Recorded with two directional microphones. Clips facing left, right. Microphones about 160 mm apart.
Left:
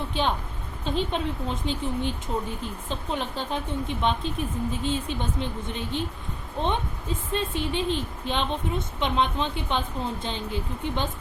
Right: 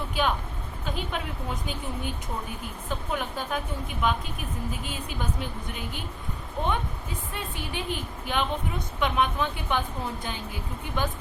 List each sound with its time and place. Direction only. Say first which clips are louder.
0.1 s speech: right 1 dB; 25° left (ahead or behind)